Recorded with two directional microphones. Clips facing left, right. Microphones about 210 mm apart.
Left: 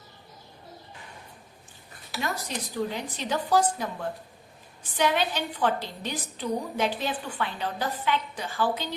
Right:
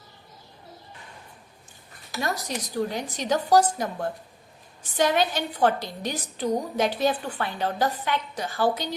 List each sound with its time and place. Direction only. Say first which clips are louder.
2.1 s a woman's voice: right 3 dB; 45° right (ahead or behind)